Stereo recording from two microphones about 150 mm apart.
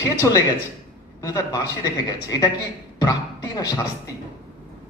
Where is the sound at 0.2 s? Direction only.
25° left (ahead or behind).